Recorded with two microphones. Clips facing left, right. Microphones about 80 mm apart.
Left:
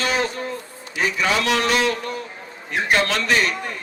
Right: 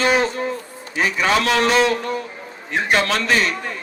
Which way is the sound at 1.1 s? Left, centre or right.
Right.